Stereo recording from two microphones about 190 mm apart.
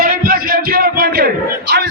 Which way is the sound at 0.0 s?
50° right (ahead or behind).